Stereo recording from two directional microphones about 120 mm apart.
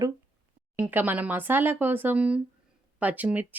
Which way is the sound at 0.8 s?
15° right (ahead or behind).